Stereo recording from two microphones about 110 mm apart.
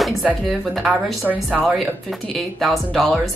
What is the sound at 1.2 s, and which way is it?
Speech, 15° right (ahead or behind).